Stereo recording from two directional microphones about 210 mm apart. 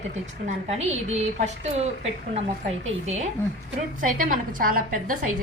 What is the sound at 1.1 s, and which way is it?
Speech, 35° right (ahead or behind).